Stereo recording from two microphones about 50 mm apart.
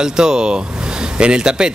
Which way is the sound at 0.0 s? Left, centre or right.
Centre.